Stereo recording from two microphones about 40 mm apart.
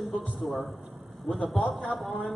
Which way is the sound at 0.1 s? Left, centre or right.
Centre.